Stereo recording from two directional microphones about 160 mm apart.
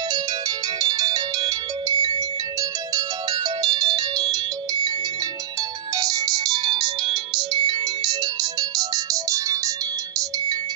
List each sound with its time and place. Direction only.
0.7 s ringtone: 25° right (ahead or behind)
5.9 s ringtone: 25° right (ahead or behind)